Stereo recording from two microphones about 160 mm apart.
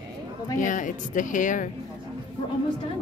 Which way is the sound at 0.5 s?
55° left (ahead or behind).